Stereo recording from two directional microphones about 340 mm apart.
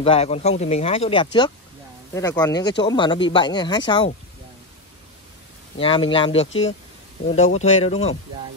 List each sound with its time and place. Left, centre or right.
0.0 s speech: centre
5.8 s speech: centre